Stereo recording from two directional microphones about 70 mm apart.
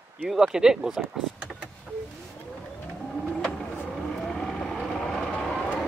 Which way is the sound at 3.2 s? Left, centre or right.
Centre.